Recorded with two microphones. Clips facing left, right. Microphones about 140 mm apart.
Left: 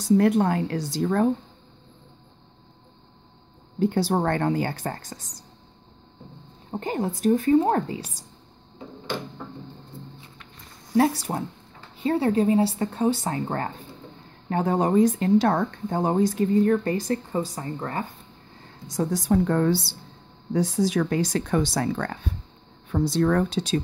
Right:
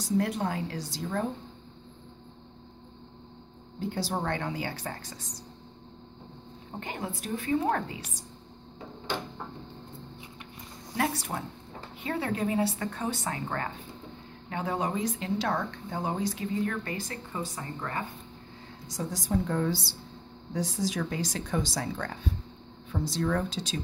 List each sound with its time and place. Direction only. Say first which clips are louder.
0.2 s speech: left 9 dB; 60° left (ahead or behind)
3.8 s speech: left 9 dB; 60° left (ahead or behind); by 5.4 s 45° left (ahead or behind)
6.7 s a woman's voice: left 9 dB; 40° left (ahead or behind)
11.0 s a woman's voice: left 9 dB; 35° left (ahead or behind)
18.9 s speech: left 9 dB; 60° left (ahead or behind)